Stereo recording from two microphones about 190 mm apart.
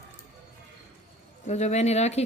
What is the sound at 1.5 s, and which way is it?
Speech, 35° left (ahead or behind).